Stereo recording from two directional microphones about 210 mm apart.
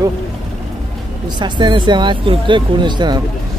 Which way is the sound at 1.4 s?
20° right (ahead or behind).